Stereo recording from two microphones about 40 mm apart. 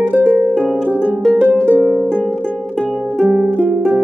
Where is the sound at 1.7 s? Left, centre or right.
Right.